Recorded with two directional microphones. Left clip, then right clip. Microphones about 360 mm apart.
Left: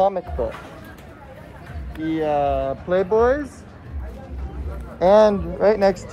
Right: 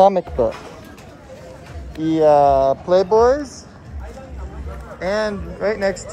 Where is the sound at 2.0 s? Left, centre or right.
Centre.